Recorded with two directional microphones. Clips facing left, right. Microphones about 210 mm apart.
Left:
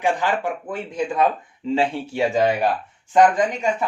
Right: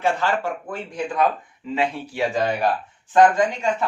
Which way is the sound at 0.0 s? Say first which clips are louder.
Left 1 dB; 15° left (ahead or behind).